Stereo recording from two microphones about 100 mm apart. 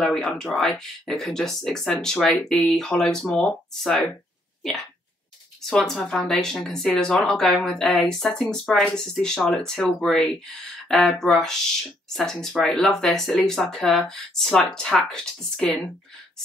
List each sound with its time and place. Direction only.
0.0 s speech: 5° left (ahead or behind)
5.7 s speech: 10° left (ahead or behind)